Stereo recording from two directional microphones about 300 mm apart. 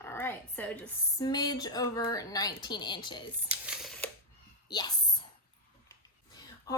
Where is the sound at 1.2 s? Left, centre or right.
Centre.